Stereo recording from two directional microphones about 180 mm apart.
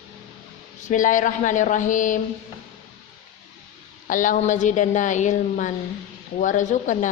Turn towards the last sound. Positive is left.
turn(degrees=45)  # may be behind; listen again after turning